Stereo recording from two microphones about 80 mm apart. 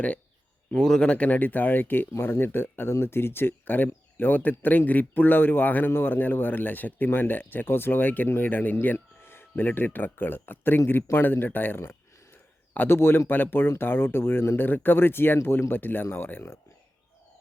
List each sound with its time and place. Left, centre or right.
0.7 s speech: centre; by 16.6 s left